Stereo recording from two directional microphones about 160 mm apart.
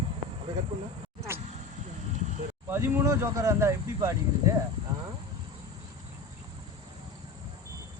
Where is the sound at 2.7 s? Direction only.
15° right (ahead or behind).